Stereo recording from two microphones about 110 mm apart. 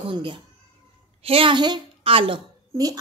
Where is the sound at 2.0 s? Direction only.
55° right (ahead or behind).